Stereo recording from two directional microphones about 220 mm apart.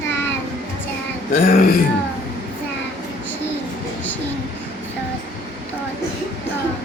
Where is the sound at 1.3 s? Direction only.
40° left (ahead or behind).